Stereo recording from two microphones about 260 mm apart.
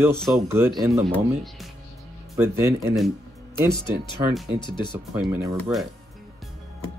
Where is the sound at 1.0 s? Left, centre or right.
Centre.